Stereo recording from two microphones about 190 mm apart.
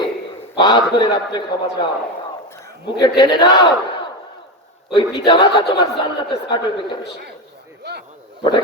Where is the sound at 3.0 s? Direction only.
20° left (ahead or behind).